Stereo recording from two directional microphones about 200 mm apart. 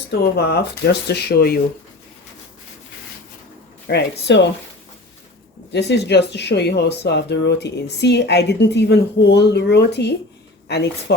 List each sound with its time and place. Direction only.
0.1 s speech: 55° left (ahead or behind)
3.8 s speech: 60° left (ahead or behind)
5.7 s speech: 60° left (ahead or behind)